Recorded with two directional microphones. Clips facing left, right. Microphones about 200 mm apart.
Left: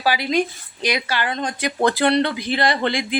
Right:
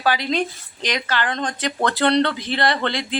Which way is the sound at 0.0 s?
10° left (ahead or behind).